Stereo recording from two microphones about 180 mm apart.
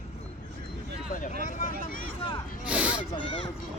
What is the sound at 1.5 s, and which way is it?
Speech, 45° left (ahead or behind).